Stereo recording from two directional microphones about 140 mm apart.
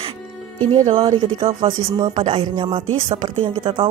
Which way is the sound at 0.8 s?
40° right (ahead or behind).